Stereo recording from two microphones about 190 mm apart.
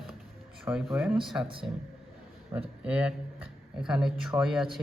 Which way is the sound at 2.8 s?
5° right (ahead or behind).